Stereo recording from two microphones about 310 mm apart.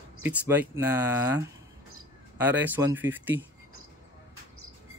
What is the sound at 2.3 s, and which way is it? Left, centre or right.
Speech, centre.